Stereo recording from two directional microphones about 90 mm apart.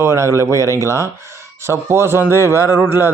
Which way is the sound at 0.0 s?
35° right (ahead or behind).